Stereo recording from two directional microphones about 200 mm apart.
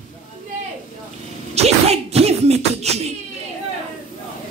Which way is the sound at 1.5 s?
30° right (ahead or behind).